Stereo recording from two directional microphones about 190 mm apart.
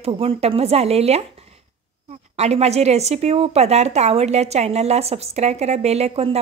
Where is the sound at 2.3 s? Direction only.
35° right (ahead or behind).